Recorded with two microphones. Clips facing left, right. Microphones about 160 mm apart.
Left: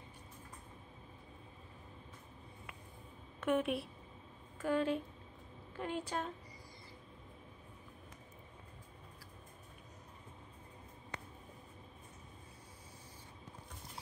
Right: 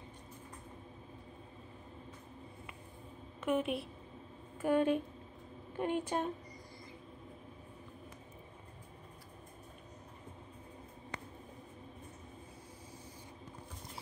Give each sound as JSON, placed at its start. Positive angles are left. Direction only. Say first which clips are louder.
{"t": 3.3, "sound": "a woman's voice", "louder": "even", "side_deg": 0}
{"t": 4.6, "sound": "a woman's voice", "louder": "right 4 dB", "side_deg": -15}